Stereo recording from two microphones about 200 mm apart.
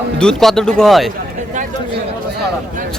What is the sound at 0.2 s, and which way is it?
Speech, 5° left (ahead or behind).